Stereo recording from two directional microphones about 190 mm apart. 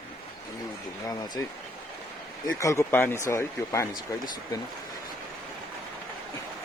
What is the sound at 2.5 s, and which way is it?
Speech, 15° left (ahead or behind).